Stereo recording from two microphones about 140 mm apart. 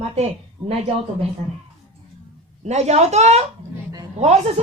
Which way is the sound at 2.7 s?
55° right (ahead or behind).